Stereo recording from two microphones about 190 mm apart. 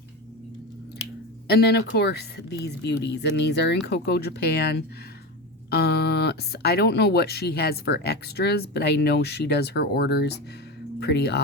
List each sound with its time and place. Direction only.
1.5 s speech: 60° left (ahead or behind)